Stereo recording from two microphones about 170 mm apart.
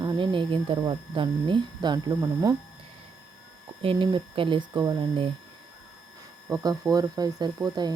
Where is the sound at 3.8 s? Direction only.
30° right (ahead or behind).